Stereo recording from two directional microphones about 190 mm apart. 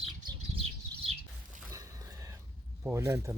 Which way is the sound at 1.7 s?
15° right (ahead or behind).